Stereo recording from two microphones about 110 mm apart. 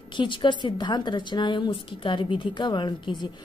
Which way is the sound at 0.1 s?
45° left (ahead or behind).